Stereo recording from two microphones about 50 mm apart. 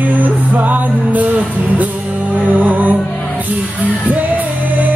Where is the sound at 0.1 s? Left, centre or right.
Right.